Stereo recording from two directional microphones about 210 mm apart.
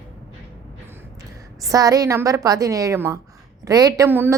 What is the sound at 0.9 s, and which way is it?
A woman's voice, 15° right (ahead or behind).